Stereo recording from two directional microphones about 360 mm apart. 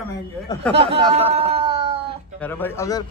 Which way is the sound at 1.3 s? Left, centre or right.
Centre.